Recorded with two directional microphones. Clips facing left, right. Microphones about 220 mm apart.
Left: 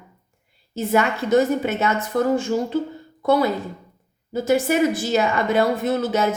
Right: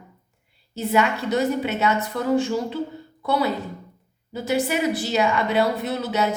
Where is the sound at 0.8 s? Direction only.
45° left (ahead or behind).